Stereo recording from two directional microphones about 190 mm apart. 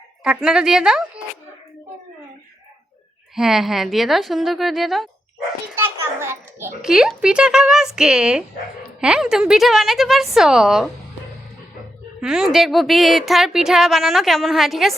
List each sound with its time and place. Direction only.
0.3 s a woman's voice: 5° right (ahead or behind)
3.3 s a woman's voice: centre (ahead or behind)
5.7 s a child's voice: 15° right (ahead or behind)
12.2 s a woman's voice: 5° right (ahead or behind)